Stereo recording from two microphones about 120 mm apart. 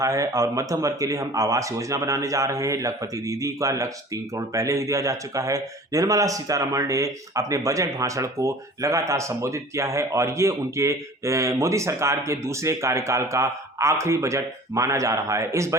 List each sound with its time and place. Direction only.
0.0 s speech: 25° right (ahead or behind)